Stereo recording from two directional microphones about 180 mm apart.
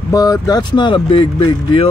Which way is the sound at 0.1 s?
20° left (ahead or behind).